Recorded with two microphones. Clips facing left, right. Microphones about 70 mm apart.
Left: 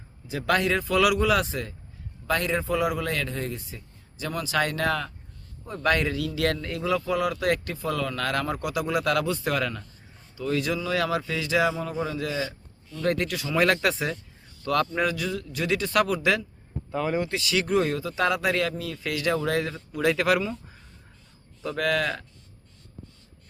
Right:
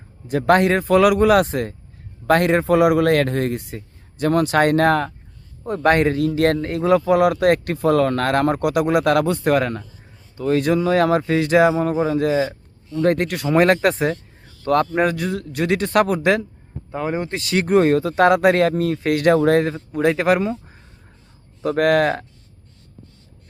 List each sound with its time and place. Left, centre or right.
0.3 s a man's voice: right
16.9 s a man's voice: right
21.6 s a man's voice: right